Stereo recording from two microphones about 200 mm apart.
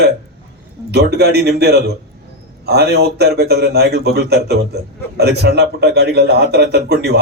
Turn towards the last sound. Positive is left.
turn(degrees=-55)  # may be behind; listen again after turning